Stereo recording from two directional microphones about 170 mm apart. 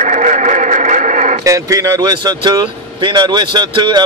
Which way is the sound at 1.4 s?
20° right (ahead or behind).